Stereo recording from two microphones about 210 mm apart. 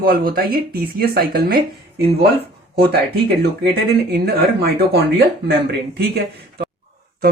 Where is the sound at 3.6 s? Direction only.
50° right (ahead or behind).